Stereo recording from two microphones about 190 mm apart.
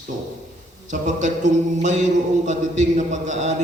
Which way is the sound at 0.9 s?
40° right (ahead or behind).